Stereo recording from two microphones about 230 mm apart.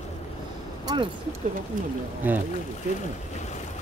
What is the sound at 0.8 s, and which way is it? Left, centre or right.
Vehicle, right.